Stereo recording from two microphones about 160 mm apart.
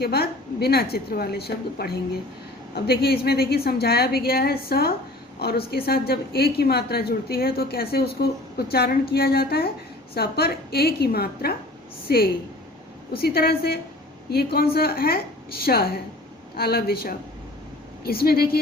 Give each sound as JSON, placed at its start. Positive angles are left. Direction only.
{"t": 0.0, "sound": "a woman's voice", "side_deg": 75}